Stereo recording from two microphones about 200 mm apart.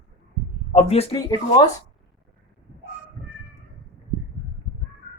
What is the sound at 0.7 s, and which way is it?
Speech, 30° left (ahead or behind).